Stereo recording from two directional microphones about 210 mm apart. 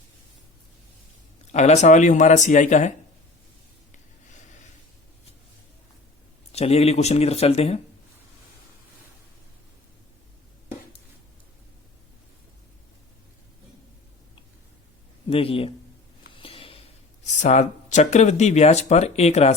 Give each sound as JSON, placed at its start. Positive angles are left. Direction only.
{"t": 1.5, "sound": "speech", "side_deg": 35}
{"t": 6.5, "sound": "speech", "side_deg": 30}
{"t": 15.3, "sound": "speech", "side_deg": 25}
{"t": 16.4, "sound": "a sound", "side_deg": 25}
{"t": 17.2, "sound": "speech", "side_deg": 35}